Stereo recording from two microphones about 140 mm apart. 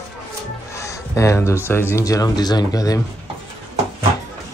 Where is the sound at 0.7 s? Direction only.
20° left (ahead or behind).